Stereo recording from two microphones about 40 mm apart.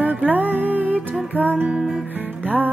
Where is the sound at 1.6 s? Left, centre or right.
Right.